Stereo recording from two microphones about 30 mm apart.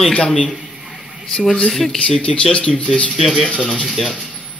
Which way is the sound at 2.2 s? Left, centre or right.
Left.